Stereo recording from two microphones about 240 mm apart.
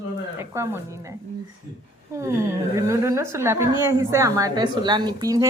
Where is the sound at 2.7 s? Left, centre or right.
Centre.